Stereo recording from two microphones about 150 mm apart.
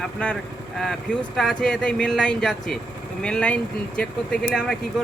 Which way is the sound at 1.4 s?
5° left (ahead or behind).